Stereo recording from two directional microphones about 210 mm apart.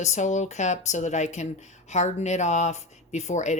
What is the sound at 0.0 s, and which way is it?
Speech, 35° left (ahead or behind).